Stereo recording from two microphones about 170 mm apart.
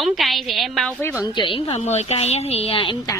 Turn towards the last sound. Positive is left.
turn(degrees=30)  # may be behind; listen again after turning